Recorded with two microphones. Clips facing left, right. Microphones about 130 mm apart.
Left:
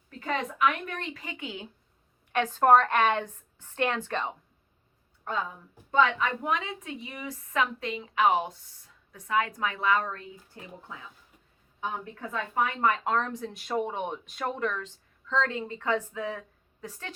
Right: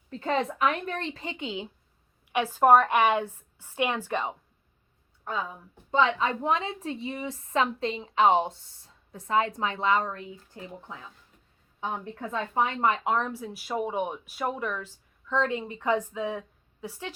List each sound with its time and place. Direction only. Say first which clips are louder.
0.1 s a woman's voice: right 4 dB; 30° right (ahead or behind)
2.3 s speech: right 1 dB; 10° right (ahead or behind)
5.9 s a woman's voice: right 1 dB; 25° right (ahead or behind)
12.3 s speech: right 2 dB; 25° right (ahead or behind)